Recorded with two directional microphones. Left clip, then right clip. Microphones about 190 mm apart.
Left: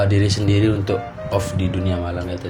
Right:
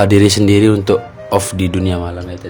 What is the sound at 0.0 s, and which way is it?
Speech, 55° right (ahead or behind).